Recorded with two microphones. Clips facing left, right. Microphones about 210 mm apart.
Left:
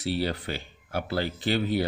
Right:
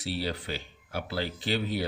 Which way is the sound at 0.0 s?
55° left (ahead or behind).